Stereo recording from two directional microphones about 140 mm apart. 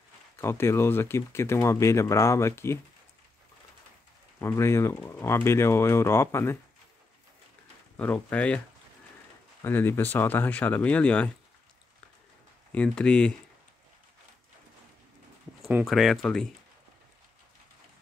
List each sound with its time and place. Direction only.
0.4 s speech: 20° left (ahead or behind)
4.4 s speech: 20° left (ahead or behind)
8.0 s speech: 10° left (ahead or behind)
9.6 s speech: 15° left (ahead or behind)
12.7 s speech: 5° left (ahead or behind)
15.8 s speech: centre (ahead or behind)